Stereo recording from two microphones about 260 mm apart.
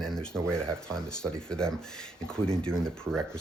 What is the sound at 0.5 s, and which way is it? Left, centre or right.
Speech, centre.